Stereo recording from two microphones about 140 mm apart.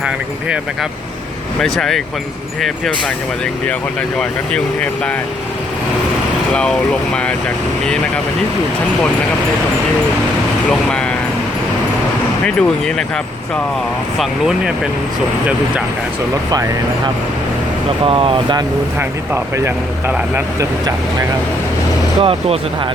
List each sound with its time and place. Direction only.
0.0 s speech: 5° right (ahead or behind)
4.2 s speech: 5° left (ahead or behind)
6.5 s speech: 5° left (ahead or behind)
10.7 s speech: 5° left (ahead or behind)
12.5 s speech: 5° left (ahead or behind)
14.2 s speech: 5° right (ahead or behind)
18.0 s speech: 40° right (ahead or behind)
18.9 s speech: 15° right (ahead or behind)
20.6 s speech: 25° right (ahead or behind)
22.2 s speech: 40° right (ahead or behind)